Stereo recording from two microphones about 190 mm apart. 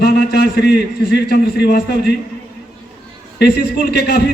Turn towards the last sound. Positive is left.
turn(degrees=55)  # may be behind; listen again after turning